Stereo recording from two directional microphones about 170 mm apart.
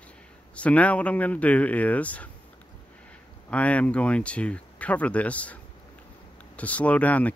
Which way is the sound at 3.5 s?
10° left (ahead or behind).